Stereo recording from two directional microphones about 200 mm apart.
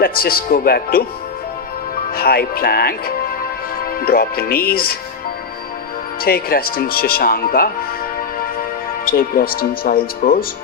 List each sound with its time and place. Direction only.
0.0 s speech: 50° left (ahead or behind)
2.1 s speech: 50° left (ahead or behind)
4.0 s speech: 50° left (ahead or behind)
6.2 s speech: 50° left (ahead or behind)
9.0 s speech: 45° left (ahead or behind)